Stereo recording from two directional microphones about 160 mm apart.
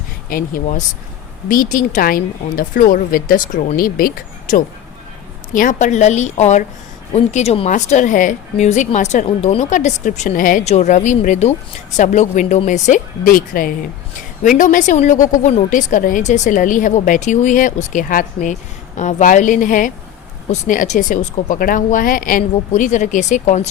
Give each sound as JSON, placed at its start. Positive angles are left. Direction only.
{"t": 0.3, "sound": "a woman's voice", "side_deg": 60}
{"t": 7.7, "sound": "a woman's voice", "side_deg": 50}